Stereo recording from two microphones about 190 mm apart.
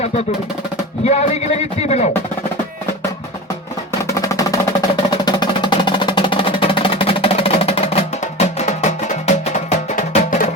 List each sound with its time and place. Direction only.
1.0 s a sound: 35° left (ahead or behind)
4.0 s percussion: 15° left (ahead or behind)
5.2 s music: 25° left (ahead or behind); by 10.5 s 45° left (ahead or behind)